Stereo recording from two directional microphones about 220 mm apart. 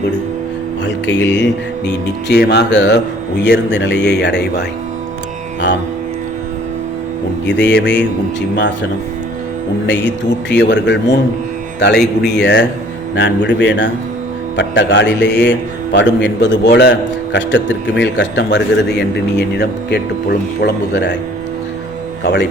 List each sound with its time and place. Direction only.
1.0 s a man's voice: 55° left (ahead or behind)
7.6 s a man's voice: 50° left (ahead or behind)
11.9 s speech: centre (ahead or behind)
12.4 s a man's voice: 50° left (ahead or behind)
22.2 s speech: 50° left (ahead or behind)